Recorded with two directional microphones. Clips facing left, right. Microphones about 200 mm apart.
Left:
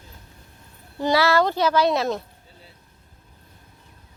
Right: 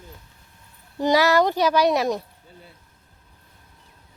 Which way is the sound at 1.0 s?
15° right (ahead or behind).